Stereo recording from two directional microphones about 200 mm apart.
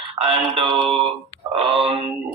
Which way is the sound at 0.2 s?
25° right (ahead or behind).